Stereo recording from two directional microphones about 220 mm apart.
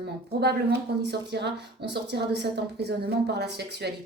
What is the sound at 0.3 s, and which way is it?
Speech, 45° right (ahead or behind).